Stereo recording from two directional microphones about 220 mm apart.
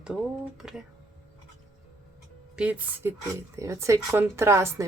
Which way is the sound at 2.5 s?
5° right (ahead or behind).